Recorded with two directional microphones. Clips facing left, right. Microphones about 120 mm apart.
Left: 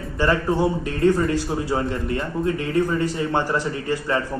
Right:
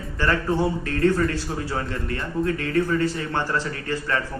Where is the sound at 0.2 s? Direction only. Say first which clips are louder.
Left 2 dB; 15° left (ahead or behind).